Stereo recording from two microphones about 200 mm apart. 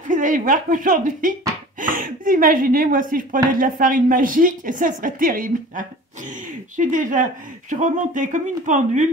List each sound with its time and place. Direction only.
0.1 s speech: 40° right (ahead or behind)